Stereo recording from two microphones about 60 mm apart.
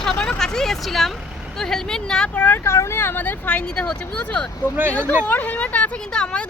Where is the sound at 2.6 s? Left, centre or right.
Left; by 4.5 s centre.